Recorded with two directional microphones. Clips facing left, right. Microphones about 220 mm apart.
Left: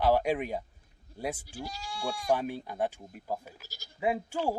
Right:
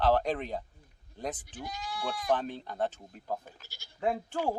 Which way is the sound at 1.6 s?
30° left (ahead or behind).